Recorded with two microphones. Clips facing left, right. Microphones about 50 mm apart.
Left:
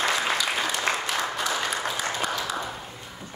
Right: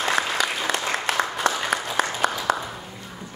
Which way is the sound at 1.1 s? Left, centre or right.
Right.